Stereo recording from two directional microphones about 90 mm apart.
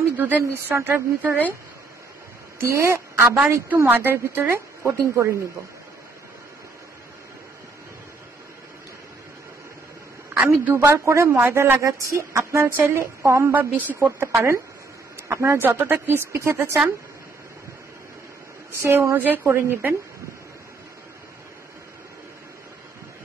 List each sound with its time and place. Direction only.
0.2 s a woman's voice: 20° right (ahead or behind)
2.6 s a woman's voice: 30° right (ahead or behind)
10.7 s a woman's voice: 35° right (ahead or behind)
18.8 s speech: 30° right (ahead or behind)
19.1 s a woman's voice: 20° right (ahead or behind)